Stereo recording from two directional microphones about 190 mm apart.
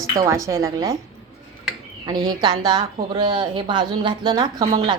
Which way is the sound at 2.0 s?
20° right (ahead or behind).